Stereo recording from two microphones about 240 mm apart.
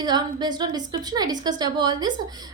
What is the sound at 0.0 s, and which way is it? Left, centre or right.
A woman's voice, centre.